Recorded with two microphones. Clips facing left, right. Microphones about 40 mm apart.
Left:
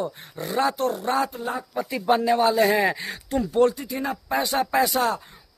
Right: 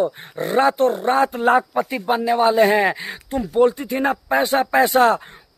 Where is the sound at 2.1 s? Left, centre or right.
Centre.